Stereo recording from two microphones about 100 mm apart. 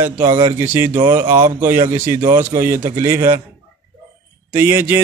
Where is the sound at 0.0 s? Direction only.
25° right (ahead or behind).